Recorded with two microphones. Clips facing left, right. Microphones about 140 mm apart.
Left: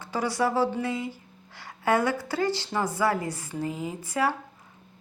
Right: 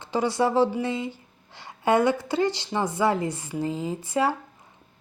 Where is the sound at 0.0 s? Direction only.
25° right (ahead or behind).